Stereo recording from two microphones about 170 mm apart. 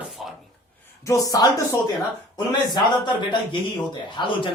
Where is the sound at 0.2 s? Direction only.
Centre (ahead or behind).